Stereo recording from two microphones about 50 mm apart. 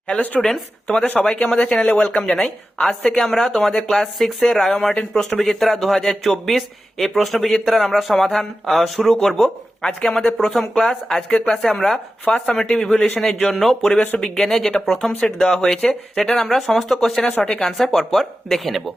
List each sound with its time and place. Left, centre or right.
0.9 s speech: left; by 11.9 s centre
12.2 s speech: left
12.5 s speech: centre
17.3 s speech: left
17.6 s speech: centre